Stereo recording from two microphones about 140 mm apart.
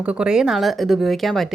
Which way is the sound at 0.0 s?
5° right (ahead or behind).